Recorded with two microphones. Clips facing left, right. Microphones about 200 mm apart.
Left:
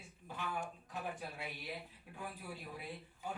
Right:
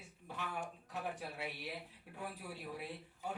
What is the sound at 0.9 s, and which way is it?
Speech, 70° right (ahead or behind).